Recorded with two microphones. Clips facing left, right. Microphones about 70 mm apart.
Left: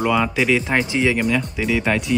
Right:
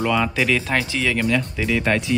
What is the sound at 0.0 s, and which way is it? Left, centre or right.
Speech, centre.